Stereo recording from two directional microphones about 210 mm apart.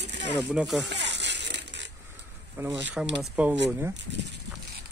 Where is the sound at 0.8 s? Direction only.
55° right (ahead or behind).